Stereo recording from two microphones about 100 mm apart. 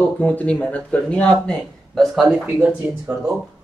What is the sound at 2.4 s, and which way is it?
Speech, 15° right (ahead or behind).